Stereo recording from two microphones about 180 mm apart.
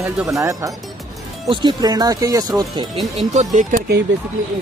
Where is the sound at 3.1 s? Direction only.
40° right (ahead or behind).